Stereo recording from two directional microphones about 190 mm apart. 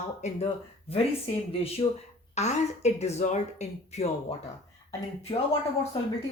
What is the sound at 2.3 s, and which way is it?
Speech, 35° left (ahead or behind).